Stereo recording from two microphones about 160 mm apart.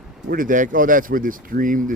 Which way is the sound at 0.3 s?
55° right (ahead or behind).